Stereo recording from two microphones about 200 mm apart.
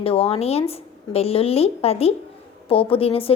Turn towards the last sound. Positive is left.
turn(degrees=30)  # may be behind; listen again after turning